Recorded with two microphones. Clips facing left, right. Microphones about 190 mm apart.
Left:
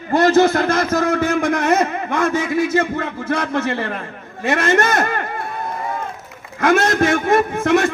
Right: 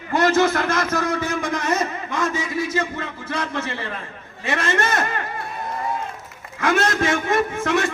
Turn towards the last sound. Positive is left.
turn(degrees=40)  # may be behind; listen again after turning